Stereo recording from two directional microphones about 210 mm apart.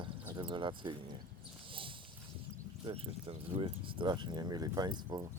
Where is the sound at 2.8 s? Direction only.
25° right (ahead or behind).